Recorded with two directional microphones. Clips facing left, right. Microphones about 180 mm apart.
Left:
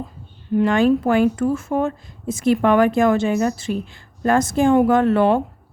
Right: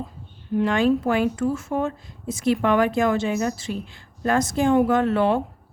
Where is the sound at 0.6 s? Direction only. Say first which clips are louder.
Left 3 dB; 50° left (ahead or behind).